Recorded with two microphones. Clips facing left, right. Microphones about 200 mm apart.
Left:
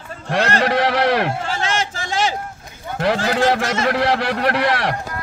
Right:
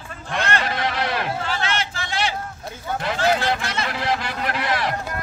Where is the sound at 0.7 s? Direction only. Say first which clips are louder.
Left 8 dB; 70° left (ahead or behind).